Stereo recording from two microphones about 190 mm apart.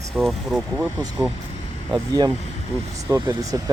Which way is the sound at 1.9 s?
20° right (ahead or behind).